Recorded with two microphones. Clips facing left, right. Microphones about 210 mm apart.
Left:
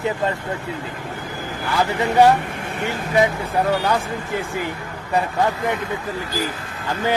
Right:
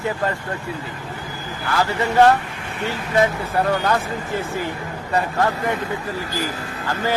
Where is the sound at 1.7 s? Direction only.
15° left (ahead or behind).